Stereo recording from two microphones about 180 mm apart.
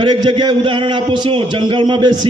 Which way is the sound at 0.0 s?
25° right (ahead or behind).